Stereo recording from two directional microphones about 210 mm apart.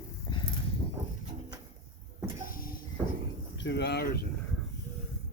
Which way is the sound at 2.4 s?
40° left (ahead or behind).